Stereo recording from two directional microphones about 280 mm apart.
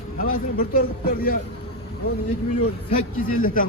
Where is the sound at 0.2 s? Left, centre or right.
Left.